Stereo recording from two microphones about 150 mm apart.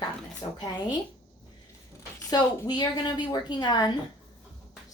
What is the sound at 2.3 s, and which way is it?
A woman's voice, 25° left (ahead or behind).